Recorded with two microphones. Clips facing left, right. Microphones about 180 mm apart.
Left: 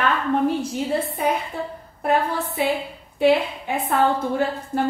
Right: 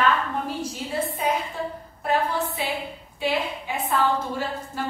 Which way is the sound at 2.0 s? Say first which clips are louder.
Left 3 dB; 55° left (ahead or behind).